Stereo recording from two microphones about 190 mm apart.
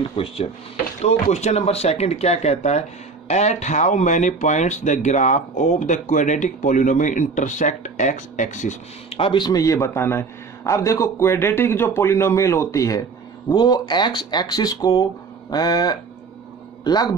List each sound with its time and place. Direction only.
0.1 s speech: 30° left (ahead or behind)